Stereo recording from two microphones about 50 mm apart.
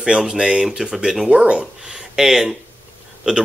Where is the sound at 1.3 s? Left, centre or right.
Right.